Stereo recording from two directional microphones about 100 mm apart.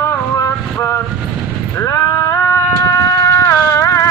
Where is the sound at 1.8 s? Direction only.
30° left (ahead or behind).